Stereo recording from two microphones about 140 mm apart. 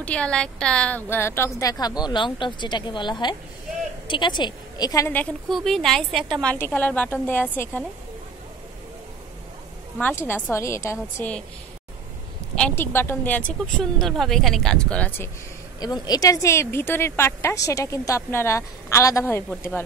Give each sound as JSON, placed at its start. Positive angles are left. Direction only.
{"t": 0.0, "sound": "a woman's voice", "side_deg": 10}
{"t": 5.1, "sound": "a woman's voice", "side_deg": 5}
{"t": 10.2, "sound": "speech", "side_deg": 15}
{"t": 12.5, "sound": "speech", "side_deg": 10}
{"t": 15.8, "sound": "speech", "side_deg": 30}